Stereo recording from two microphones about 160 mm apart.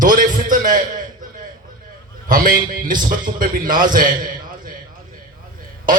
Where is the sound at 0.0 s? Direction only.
55° right (ahead or behind).